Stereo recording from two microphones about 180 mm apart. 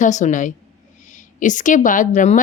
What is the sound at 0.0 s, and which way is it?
A woman's voice, 45° left (ahead or behind).